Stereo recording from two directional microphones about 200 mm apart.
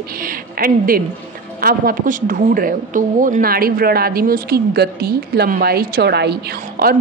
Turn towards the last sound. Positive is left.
turn(degrees=-50)  # may be behind; listen again after turning